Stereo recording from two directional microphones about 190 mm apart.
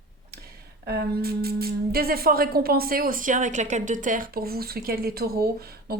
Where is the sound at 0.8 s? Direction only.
55° right (ahead or behind).